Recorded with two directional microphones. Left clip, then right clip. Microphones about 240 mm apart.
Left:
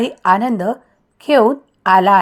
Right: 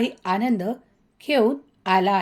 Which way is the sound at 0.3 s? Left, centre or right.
Left.